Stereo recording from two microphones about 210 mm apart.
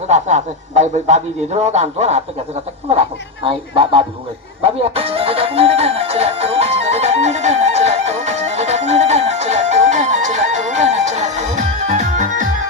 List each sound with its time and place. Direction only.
0.1 s speech: 30° right (ahead or behind)
4.6 s music: 30° right (ahead or behind)